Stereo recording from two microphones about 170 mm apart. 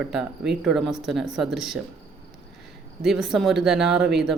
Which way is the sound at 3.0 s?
Centre (ahead or behind).